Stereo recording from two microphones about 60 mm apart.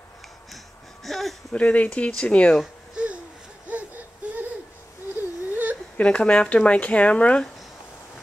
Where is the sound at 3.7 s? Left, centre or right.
Right.